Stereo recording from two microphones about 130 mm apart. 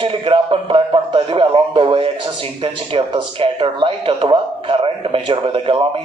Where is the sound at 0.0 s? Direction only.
45° right (ahead or behind).